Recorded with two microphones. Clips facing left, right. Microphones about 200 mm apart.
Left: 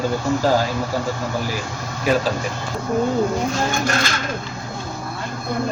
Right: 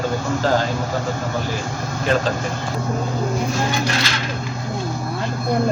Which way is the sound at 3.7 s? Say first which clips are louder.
Left 1 dB; 50° left (ahead or behind).